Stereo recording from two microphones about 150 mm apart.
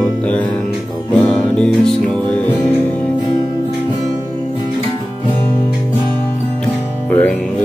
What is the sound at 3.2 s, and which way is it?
Music, 25° left (ahead or behind).